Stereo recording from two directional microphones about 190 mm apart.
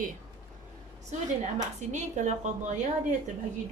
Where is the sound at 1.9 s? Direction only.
40° right (ahead or behind).